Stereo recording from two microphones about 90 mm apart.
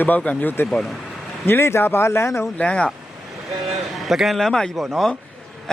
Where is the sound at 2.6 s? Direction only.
10° left (ahead or behind).